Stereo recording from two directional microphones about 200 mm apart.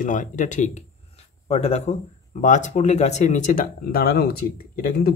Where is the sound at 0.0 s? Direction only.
40° left (ahead or behind).